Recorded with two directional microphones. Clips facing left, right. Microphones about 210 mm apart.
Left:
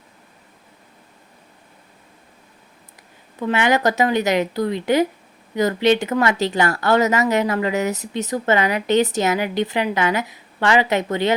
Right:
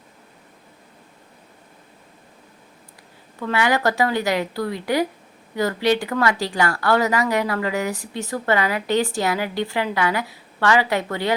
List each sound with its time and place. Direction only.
3.4 s speech: 20° left (ahead or behind)